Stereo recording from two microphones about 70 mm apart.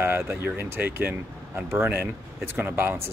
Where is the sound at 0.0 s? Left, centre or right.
Right.